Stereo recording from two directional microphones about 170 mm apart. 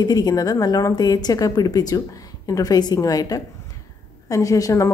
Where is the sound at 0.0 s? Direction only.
25° left (ahead or behind).